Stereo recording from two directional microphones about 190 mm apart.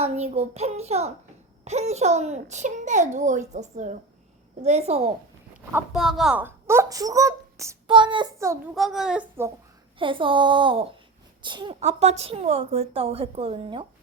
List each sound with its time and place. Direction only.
0.0 s a woman's voice: 35° right (ahead or behind)
5.7 s speech: centre (ahead or behind)
7.9 s speech: 25° right (ahead or behind)
8.7 s a woman's voice: centre (ahead or behind)
10.0 s a woman's voice: 25° right (ahead or behind)